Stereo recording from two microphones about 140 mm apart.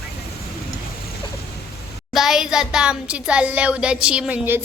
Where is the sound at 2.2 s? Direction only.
5° right (ahead or behind).